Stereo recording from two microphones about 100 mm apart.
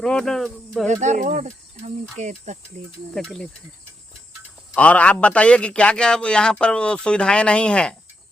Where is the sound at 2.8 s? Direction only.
90° right.